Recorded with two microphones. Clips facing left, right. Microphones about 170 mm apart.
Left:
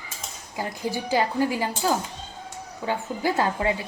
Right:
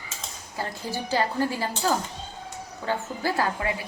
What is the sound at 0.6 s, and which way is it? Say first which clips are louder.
A woman's voice: left 3 dB; 15° left (ahead or behind).